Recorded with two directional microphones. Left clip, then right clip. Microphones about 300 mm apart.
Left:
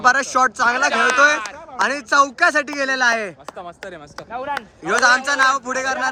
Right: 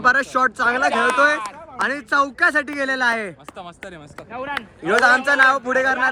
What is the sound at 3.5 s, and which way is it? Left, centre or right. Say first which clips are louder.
Speech: left 2 dB; right.